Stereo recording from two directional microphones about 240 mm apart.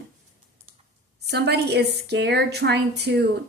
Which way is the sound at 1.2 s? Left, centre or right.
Right.